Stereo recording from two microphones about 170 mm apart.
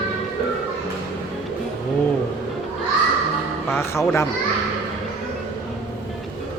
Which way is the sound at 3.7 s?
15° left (ahead or behind).